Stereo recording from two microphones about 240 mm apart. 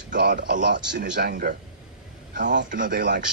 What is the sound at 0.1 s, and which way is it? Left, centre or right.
A man's voice, right.